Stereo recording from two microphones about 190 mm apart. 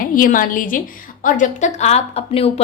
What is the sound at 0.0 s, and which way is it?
A woman's voice, 45° left (ahead or behind).